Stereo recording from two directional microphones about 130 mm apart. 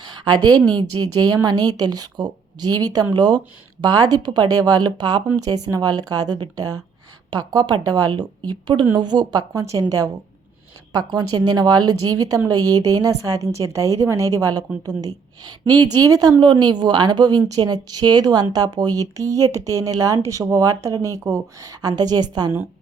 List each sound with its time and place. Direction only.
0.0 s a sound: 35° right (ahead or behind)
0.8 s a woman's voice: 30° right (ahead or behind)
10.9 s a woman's voice: 30° right (ahead or behind)